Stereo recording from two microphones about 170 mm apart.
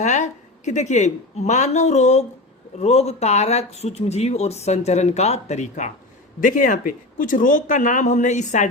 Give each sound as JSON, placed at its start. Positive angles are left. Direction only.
{"t": 0.0, "sound": "speech", "side_deg": 45}